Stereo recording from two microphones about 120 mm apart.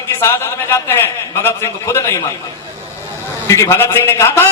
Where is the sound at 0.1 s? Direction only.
20° left (ahead or behind).